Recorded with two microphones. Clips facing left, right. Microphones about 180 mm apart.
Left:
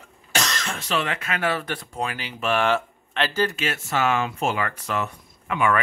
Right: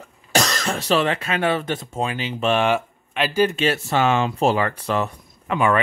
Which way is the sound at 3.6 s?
30° right (ahead or behind).